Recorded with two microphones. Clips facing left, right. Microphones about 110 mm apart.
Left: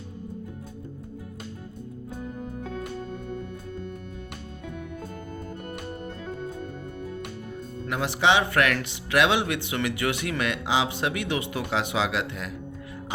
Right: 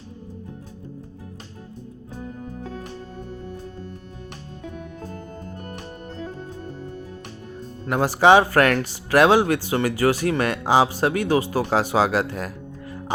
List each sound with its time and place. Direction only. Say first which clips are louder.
7.9 s speech: right 7 dB; 40° right (ahead or behind)